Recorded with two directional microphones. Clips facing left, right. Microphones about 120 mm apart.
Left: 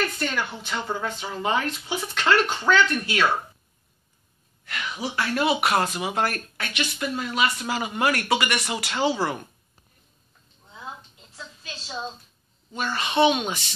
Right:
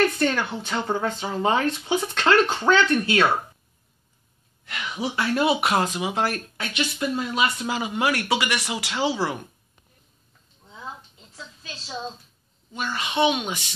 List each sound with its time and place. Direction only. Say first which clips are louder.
0.5 s speech: right 3 dB; 40° right (ahead or behind)
0.8 s speech: right 4 dB; 20° right (ahead or behind)
2.4 s speech: right 3 dB; 15° right (ahead or behind)
2.7 s speech: right 2 dB; 25° right (ahead or behind)
4.6 s speech: right 2 dB; 20° right (ahead or behind)
12.7 s speech: left 2 dB; 10° right (ahead or behind)